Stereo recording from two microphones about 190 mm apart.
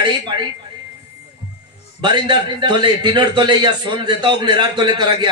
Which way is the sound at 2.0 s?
25° right (ahead or behind).